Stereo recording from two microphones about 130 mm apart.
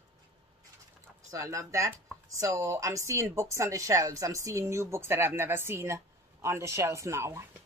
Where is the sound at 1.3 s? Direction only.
25° right (ahead or behind).